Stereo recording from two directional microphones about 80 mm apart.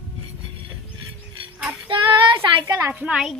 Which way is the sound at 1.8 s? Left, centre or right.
Right.